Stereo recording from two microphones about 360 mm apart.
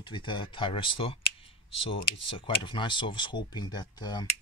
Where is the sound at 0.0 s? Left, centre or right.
Centre.